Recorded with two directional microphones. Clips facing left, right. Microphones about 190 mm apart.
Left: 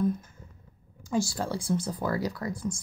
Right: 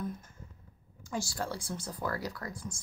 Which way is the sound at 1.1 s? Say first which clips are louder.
Left 7 dB; 25° left (ahead or behind).